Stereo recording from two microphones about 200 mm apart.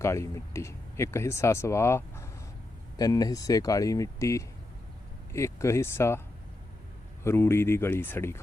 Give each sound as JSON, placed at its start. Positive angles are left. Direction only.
{"t": 0.0, "sound": "speech", "side_deg": 15}
{"t": 7.3, "sound": "speech", "side_deg": 10}